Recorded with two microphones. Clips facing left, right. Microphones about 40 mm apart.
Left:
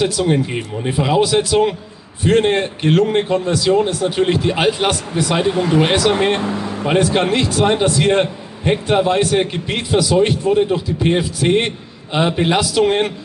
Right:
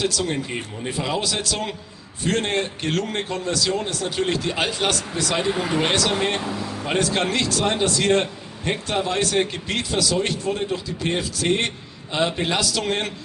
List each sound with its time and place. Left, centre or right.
0.0 s a man's voice: left
5.5 s speech: centre
5.8 s speech: centre
6.1 s speech: left
6.9 s a man's voice: left